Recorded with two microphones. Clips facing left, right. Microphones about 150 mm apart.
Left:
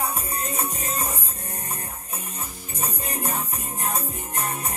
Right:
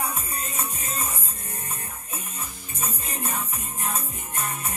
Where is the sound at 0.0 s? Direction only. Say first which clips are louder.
Left 3 dB; 35° left (ahead or behind).